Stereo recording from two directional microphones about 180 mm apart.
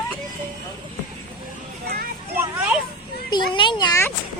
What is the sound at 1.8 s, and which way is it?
Children playing, 55° right (ahead or behind).